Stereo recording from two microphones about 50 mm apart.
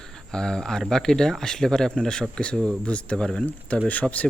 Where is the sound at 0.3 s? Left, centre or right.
Centre.